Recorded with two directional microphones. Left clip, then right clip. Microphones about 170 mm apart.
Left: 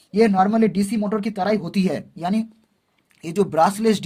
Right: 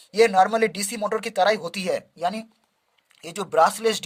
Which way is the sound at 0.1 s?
35° right (ahead or behind).